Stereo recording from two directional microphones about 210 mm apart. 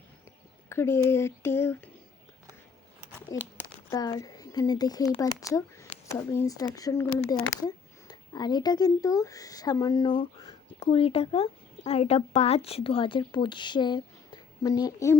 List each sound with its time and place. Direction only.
0.7 s speech: 10° left (ahead or behind)
3.6 s a sound: 15° left (ahead or behind)
5.5 s speech: 15° left (ahead or behind)